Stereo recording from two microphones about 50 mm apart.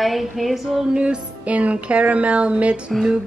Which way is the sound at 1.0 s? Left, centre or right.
Right.